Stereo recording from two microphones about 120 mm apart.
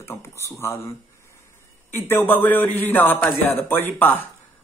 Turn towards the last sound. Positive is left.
turn(degrees=15)  # may be behind; listen again after turning